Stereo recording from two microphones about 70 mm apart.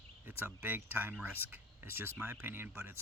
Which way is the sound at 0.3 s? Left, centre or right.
Right.